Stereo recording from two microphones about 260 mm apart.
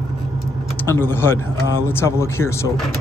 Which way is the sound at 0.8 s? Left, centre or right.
Centre.